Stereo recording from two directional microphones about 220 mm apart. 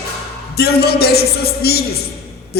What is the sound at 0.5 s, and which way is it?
A man's voice, 45° left (ahead or behind).